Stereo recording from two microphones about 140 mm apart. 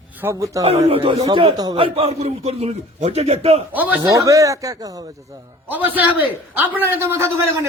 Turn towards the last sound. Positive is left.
turn(degrees=-20)  # may be behind; listen again after turning